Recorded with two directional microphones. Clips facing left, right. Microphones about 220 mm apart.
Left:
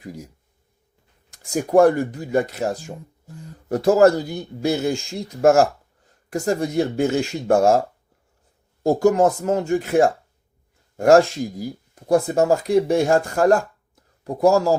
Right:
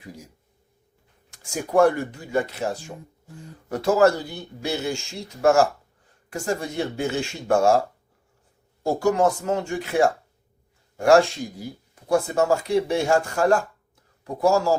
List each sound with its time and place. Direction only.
1.3 s speech: 40° left (ahead or behind)
6.3 s speech: 40° left (ahead or behind)
8.8 s speech: 40° left (ahead or behind)